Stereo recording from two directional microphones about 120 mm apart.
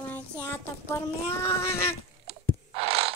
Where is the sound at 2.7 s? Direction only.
55° right (ahead or behind).